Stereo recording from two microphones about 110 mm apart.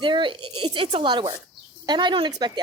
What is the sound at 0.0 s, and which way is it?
A woman's voice, 50° right (ahead or behind).